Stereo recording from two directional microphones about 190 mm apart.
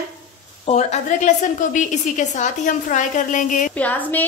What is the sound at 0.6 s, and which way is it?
A woman's voice, 35° left (ahead or behind).